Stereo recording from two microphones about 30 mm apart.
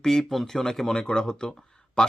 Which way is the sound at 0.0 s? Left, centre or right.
Centre.